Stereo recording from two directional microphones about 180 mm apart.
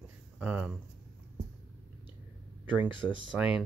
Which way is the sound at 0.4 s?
5° right (ahead or behind).